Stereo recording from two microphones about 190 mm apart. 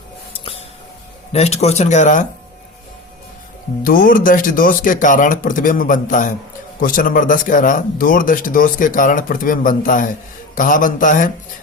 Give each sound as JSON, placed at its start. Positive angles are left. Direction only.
{"t": 1.3, "sound": "speech", "side_deg": 35}
{"t": 3.8, "sound": "speech", "side_deg": 45}